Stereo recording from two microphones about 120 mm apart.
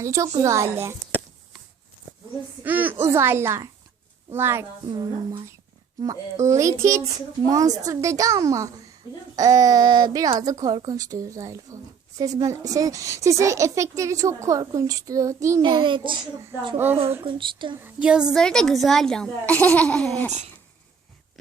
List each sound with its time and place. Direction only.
0.0 s speech: 25° right (ahead or behind)
2.6 s speech: 15° right (ahead or behind)
4.9 s speech: 35° right (ahead or behind)
15.6 s speech: 40° right (ahead or behind)
16.7 s speech: 20° right (ahead or behind)
17.2 s speech: 45° right (ahead or behind)
17.7 s speech: 15° right (ahead or behind)
18.3 s a child's voice: 5° left (ahead or behind)